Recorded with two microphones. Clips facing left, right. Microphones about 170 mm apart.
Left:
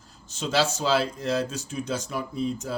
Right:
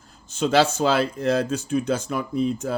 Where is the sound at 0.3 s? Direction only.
55° right (ahead or behind).